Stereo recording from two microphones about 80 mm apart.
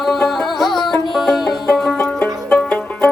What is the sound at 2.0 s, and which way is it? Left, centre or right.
Music, left.